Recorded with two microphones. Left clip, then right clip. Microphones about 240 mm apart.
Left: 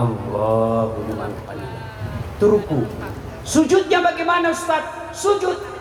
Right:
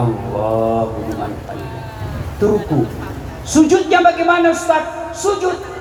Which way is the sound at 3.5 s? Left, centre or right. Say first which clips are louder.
Right 4 dB; left.